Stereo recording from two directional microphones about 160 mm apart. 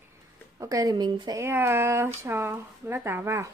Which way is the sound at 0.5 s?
20° right (ahead or behind).